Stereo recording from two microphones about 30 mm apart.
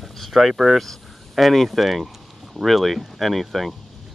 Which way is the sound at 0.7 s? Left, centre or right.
Centre.